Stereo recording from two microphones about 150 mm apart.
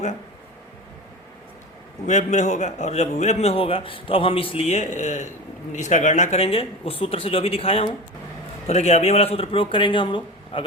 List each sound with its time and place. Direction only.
2.0 s a man's voice: 50° left (ahead or behind); by 10.7 s 35° left (ahead or behind)